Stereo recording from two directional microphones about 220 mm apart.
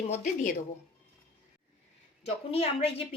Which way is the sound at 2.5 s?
25° left (ahead or behind).